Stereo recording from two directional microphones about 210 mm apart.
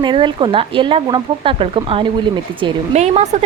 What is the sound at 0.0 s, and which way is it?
Speech, 25° right (ahead or behind).